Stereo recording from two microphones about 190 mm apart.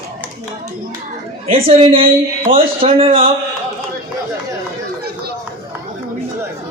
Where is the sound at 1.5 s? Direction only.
30° right (ahead or behind).